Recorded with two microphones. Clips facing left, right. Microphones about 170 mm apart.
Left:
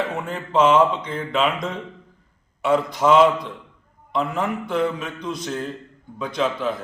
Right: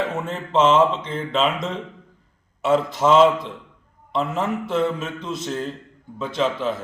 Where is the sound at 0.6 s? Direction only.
25° right (ahead or behind).